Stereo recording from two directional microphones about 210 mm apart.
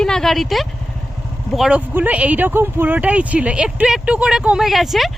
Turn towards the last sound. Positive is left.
turn(degrees=0)  # may be behind; listen again after turning